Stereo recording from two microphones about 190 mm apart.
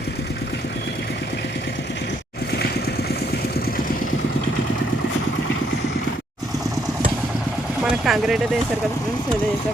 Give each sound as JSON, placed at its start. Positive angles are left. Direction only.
{"t": 8.0, "sound": "speech", "side_deg": 0}